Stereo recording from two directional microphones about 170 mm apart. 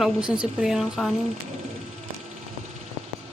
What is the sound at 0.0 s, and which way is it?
Speech, 5° right (ahead or behind).